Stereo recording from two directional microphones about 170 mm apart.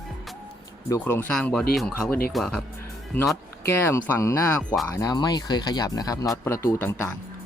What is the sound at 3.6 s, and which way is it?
Speech, 15° left (ahead or behind).